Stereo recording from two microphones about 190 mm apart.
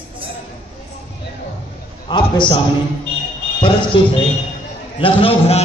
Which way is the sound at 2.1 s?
25° left (ahead or behind).